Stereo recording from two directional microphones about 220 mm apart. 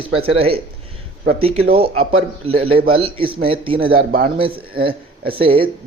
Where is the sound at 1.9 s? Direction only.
75° right (ahead or behind).